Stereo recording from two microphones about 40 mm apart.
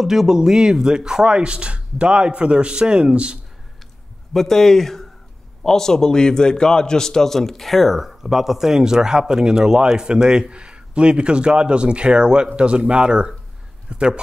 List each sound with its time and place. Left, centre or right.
0.0 s speech: centre; by 3.3 s right
4.3 s a man's voice: centre
8.1 s a man's voice: centre; by 14.2 s right